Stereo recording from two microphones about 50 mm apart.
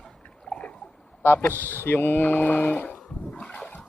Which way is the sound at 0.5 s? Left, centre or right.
Left.